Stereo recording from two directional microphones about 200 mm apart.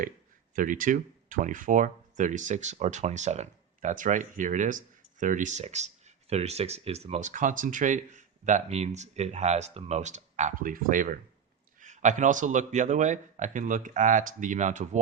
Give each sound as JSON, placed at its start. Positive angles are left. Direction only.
{"t": 0.5, "sound": "speech", "side_deg": -40}